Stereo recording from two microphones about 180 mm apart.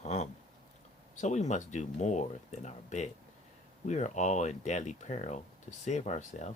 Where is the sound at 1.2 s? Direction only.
40° left (ahead or behind).